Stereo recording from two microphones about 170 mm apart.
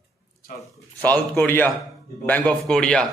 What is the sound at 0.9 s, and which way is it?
A man's voice, 10° left (ahead or behind).